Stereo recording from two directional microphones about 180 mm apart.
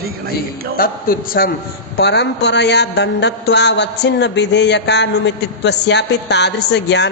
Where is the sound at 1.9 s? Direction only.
70° left (ahead or behind).